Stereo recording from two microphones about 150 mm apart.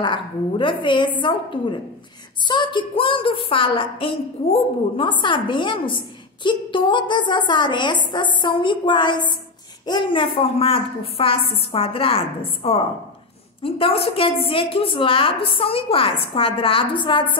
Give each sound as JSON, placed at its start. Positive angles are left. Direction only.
{"t": 0.0, "sound": "a woman's voice", "side_deg": 30}